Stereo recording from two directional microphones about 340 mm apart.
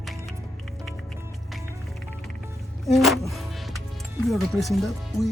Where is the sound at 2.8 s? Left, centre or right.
Centre.